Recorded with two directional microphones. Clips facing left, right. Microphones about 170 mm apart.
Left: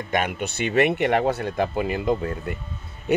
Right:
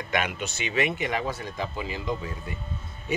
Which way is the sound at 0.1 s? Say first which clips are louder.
Left 4 dB; 50° left (ahead or behind).